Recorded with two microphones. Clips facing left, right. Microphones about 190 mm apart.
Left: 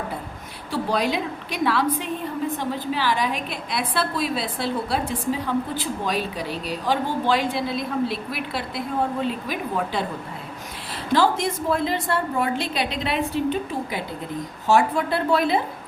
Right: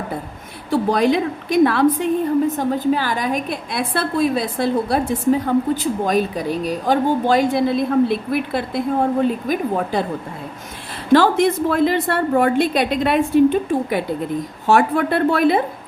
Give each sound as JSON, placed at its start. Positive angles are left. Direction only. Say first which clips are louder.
{"t": 0.7, "sound": "a woman's voice", "louder": "right 7 dB", "side_deg": -50}
{"t": 11.1, "sound": "a woman's voice", "louder": "right 7 dB", "side_deg": -60}